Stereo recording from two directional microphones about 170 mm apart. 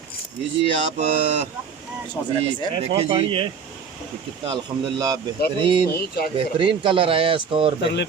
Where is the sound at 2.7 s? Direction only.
30° right (ahead or behind).